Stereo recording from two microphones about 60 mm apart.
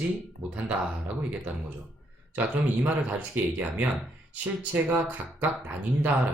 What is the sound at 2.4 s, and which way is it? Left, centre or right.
Speech, right.